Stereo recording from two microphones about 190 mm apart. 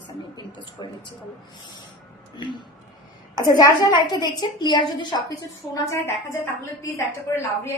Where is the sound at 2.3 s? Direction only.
25° left (ahead or behind).